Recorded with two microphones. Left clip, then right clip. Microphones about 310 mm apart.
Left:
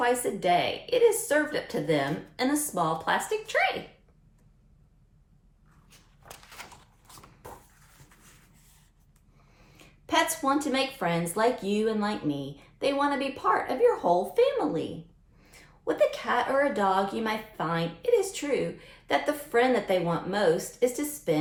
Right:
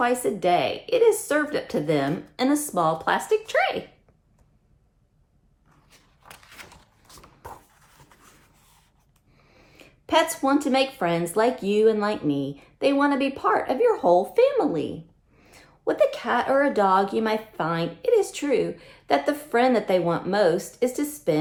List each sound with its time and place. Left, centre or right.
0.0 s speech: right
7.1 s mechanisms: centre
9.7 s a sound: right
10.7 s speech: right